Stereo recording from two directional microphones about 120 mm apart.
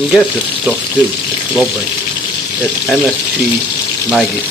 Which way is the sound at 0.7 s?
10° right (ahead or behind).